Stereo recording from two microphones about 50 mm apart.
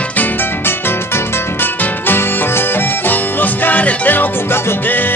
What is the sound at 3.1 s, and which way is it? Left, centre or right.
Music, left.